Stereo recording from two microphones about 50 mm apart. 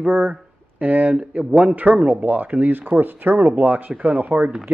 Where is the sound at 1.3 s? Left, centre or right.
Right.